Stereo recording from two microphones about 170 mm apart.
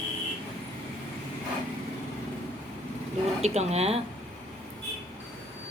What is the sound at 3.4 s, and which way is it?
Speech, 40° right (ahead or behind).